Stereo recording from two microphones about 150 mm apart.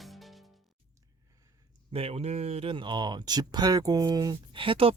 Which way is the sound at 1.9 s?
45° right (ahead or behind).